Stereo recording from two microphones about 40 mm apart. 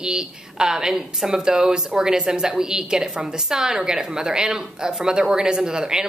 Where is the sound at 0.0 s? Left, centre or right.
Centre.